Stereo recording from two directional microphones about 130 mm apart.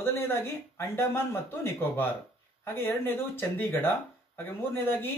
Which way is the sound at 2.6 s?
15° left (ahead or behind).